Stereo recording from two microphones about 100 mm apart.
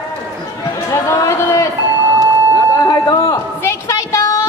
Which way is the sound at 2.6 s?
40° left (ahead or behind).